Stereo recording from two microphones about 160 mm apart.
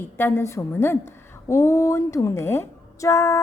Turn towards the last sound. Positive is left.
turn(degrees=20)  # may be behind; listen again after turning